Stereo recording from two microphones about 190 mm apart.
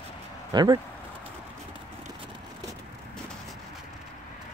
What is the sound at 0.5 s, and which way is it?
Speech, 20° right (ahead or behind).